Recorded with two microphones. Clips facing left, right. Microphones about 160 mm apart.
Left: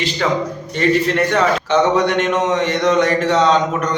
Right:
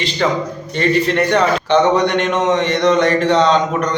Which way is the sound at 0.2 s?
Centre (ahead or behind).